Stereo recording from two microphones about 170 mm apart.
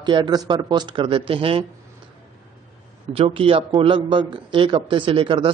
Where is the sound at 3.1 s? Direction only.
30° right (ahead or behind).